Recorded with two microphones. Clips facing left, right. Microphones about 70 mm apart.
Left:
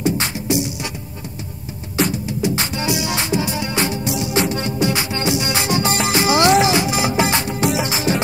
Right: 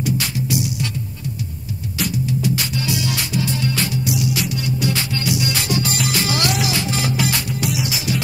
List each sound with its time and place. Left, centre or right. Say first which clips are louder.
0.0 s music: left 2 dB; left
2.0 s music: left 3 dB; left